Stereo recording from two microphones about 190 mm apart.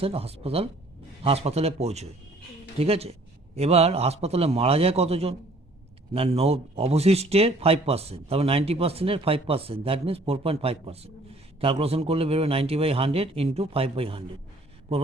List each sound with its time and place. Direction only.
0.0 s speech: 30° right (ahead or behind)